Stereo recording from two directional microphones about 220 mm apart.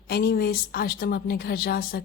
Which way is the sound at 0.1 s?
45° left (ahead or behind).